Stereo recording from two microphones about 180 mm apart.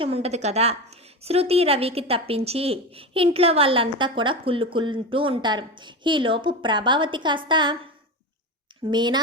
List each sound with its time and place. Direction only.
0.0 s a woman's voice: 35° right (ahead or behind)
8.9 s speech: 25° right (ahead or behind)